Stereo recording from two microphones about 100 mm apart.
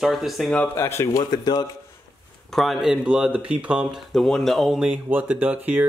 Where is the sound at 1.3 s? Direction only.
45° left (ahead or behind).